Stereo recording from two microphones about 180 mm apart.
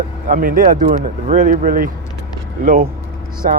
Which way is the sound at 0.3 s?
50° right (ahead or behind).